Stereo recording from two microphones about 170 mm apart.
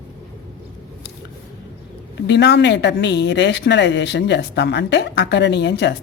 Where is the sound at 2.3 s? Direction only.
90° left.